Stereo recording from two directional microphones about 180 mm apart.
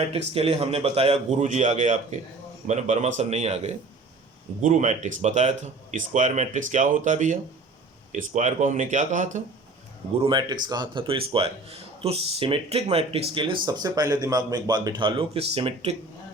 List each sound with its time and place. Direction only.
0.1 s a man's voice: 35° right (ahead or behind)
10.2 s a man's voice: 25° right (ahead or behind)